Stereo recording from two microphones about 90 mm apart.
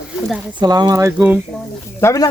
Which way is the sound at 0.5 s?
50° right (ahead or behind).